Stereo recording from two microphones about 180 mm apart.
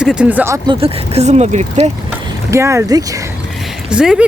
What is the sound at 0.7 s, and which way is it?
Speech, 30° right (ahead or behind).